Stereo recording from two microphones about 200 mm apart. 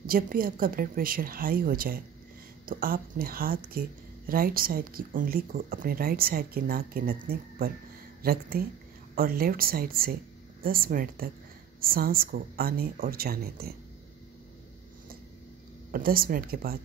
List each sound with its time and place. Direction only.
0.0 s speech: 45° right (ahead or behind)
15.9 s speech: 45° right (ahead or behind)